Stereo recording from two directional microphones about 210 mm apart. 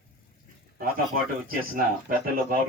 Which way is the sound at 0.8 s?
45° right (ahead or behind).